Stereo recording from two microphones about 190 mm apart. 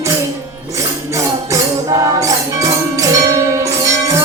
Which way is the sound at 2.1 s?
15° right (ahead or behind).